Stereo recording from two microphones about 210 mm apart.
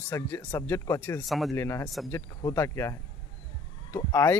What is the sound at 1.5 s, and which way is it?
Speech, 15° left (ahead or behind).